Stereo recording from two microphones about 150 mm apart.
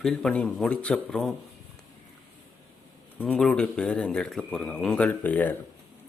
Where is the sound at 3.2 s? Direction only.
10° left (ahead or behind).